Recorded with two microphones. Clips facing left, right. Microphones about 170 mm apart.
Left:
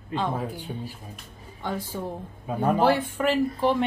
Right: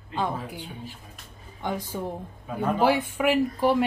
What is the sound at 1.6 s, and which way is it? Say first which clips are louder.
Speech: right 1 dB; 15° right (ahead or behind).